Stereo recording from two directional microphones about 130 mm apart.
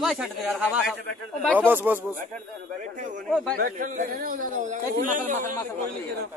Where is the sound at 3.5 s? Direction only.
90° right.